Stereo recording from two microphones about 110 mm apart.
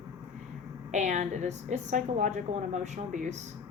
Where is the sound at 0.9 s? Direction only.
90° right.